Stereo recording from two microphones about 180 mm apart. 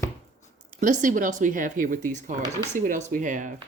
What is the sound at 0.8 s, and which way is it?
A woman's voice, 45° right (ahead or behind).